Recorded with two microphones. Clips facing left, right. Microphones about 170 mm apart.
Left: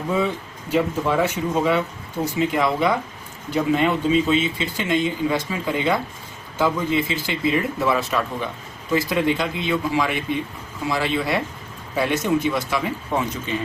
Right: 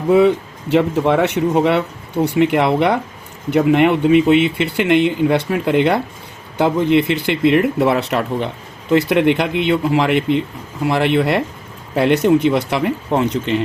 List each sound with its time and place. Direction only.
0.1 s speech: 70° right (ahead or behind)